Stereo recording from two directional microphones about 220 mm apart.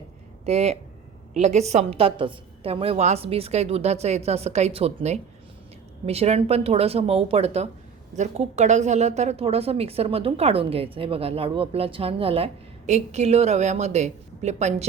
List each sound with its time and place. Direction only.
0.4 s a woman's voice: 30° right (ahead or behind)